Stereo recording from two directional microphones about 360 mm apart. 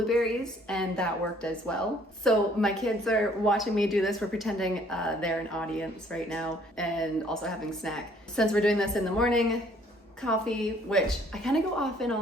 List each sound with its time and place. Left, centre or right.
0.0 s speech: centre